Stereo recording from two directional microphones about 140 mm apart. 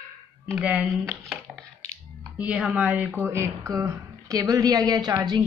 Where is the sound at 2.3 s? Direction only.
5° right (ahead or behind).